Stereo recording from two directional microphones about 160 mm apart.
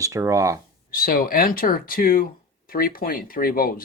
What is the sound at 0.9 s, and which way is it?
Speech, 65° left (ahead or behind).